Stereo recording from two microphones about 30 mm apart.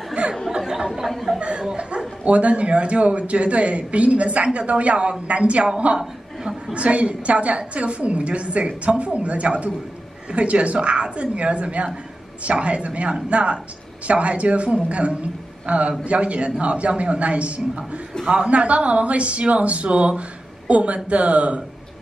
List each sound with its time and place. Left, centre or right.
0.5 s speech: centre
1.0 s speech: centre
2.2 s a woman's voice: right
6.7 s a woman's voice: right
18.5 s a woman's voice: right